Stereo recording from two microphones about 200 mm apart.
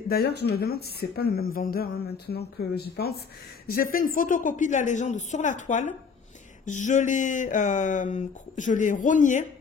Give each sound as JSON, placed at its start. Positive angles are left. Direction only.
{"t": 0.1, "sound": "speech", "side_deg": 50}